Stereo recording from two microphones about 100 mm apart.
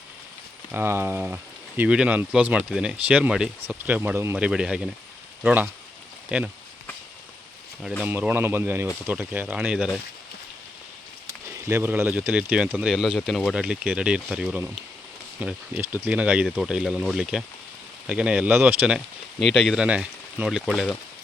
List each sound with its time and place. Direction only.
0.7 s speech: 25° right (ahead or behind)
4.4 s speech: 10° right (ahead or behind)
8.0 s speech: 15° right (ahead or behind)
11.5 s speech: 25° right (ahead or behind)
11.9 s speech: 15° right (ahead or behind)
18.9 s speech: centre (ahead or behind)